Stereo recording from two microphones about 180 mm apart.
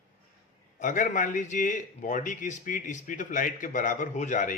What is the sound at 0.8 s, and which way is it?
A man's voice, 45° left (ahead or behind).